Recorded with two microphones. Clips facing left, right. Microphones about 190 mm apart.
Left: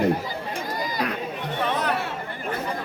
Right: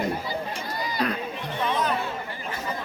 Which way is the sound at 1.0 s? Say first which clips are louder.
Right 2 dB; 10° left (ahead or behind).